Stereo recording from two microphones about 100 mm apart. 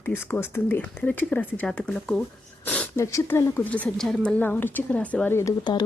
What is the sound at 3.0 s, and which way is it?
Speech, 30° left (ahead or behind).